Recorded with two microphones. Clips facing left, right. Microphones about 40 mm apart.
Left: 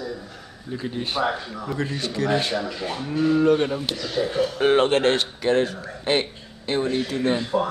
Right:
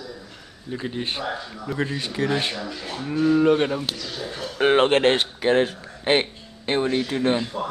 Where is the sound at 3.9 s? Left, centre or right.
Left.